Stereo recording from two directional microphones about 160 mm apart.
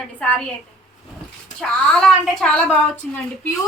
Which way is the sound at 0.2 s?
5° left (ahead or behind).